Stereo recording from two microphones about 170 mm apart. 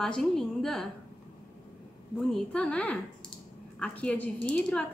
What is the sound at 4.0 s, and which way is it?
Speech, 10° left (ahead or behind).